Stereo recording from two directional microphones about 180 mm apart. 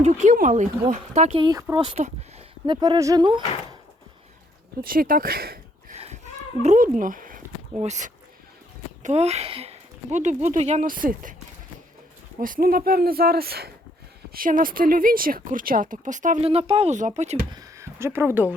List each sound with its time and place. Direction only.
0.0 s speech: 45° right (ahead or behind)
1.4 s speech: 20° right (ahead or behind)
4.8 s speech: 50° right (ahead or behind)
5.9 s a sound: 35° right (ahead or behind)
6.6 s speech: 40° right (ahead or behind)
12.4 s speech: 50° right (ahead or behind)
17.5 s speech: 20° right (ahead or behind)